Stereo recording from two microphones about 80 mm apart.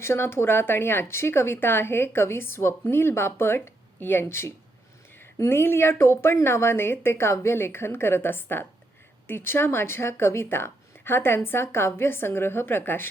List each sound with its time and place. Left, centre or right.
0.0 s a woman's voice: left